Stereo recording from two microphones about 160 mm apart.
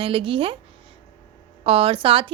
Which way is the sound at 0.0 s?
35° right (ahead or behind).